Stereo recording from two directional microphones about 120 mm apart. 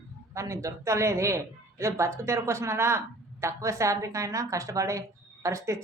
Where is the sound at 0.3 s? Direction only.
25° right (ahead or behind).